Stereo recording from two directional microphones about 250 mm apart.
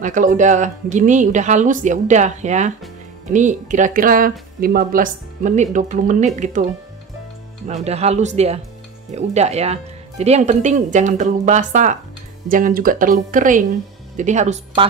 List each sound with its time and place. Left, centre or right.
0.0 s speech: right
7.8 s speech: right